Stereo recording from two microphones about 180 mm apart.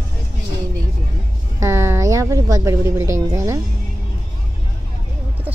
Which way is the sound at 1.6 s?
15° right (ahead or behind).